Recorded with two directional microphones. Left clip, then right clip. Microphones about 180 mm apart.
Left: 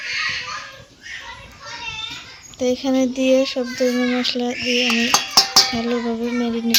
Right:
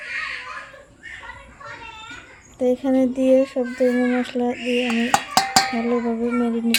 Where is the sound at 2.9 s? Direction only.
Centre (ahead or behind).